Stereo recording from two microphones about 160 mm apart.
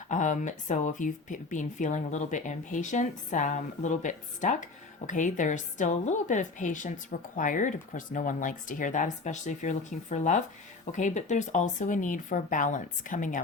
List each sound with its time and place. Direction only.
0.1 s speech: 50° left (ahead or behind)